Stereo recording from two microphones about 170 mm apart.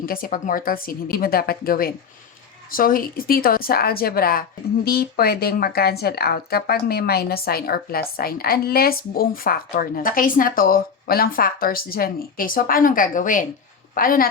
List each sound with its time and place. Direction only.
0.0 s speech: 60° left (ahead or behind)